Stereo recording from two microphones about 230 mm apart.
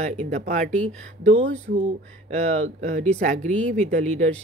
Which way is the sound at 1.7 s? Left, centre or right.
Right.